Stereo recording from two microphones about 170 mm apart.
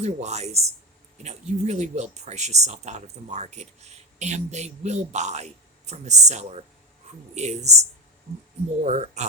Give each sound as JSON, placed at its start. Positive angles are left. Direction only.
{"t": 0.0, "sound": "speech", "side_deg": -40}
{"t": 8.8, "sound": "speech", "side_deg": -45}